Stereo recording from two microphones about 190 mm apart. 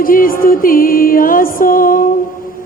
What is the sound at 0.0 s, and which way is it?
A man's voice, 50° left (ahead or behind).